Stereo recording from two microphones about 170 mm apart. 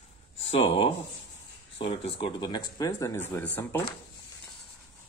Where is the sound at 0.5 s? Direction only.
35° left (ahead or behind); by 3.8 s 15° left (ahead or behind).